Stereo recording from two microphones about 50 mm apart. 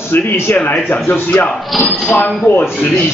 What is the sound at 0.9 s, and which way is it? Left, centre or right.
Speech, left.